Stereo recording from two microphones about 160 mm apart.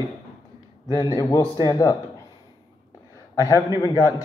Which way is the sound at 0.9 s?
20° left (ahead or behind).